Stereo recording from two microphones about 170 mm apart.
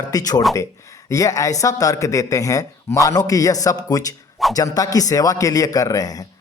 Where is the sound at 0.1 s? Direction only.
20° left (ahead or behind).